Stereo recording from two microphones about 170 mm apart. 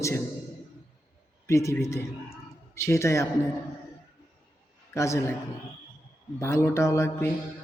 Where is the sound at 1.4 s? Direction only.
15° left (ahead or behind).